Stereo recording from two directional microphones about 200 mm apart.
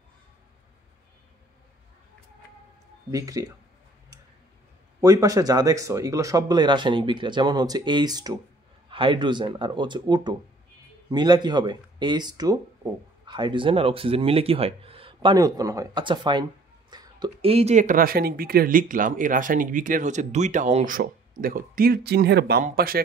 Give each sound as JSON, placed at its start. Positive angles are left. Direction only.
{"t": 3.1, "sound": "speech", "side_deg": -15}
{"t": 5.0, "sound": "speech", "side_deg": -15}